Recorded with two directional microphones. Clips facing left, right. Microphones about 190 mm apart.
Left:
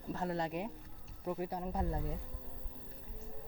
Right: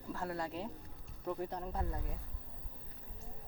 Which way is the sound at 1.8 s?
25° left (ahead or behind).